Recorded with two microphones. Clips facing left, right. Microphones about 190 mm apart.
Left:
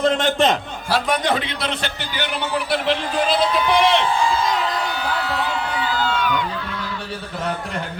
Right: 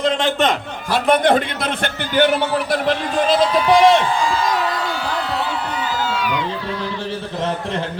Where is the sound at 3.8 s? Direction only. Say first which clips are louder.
Right 5 dB; 45° right (ahead or behind).